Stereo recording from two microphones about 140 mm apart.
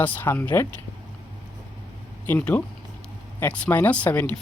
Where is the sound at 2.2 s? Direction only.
10° left (ahead or behind).